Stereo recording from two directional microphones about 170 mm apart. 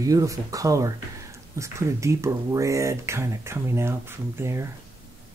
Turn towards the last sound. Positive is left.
turn(degrees=-15)  # may be behind; listen again after turning